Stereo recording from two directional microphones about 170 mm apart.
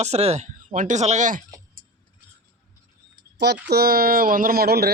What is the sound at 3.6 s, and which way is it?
Speech, 65° right (ahead or behind).